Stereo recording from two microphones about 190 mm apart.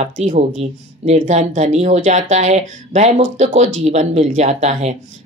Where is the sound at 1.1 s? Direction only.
40° right (ahead or behind).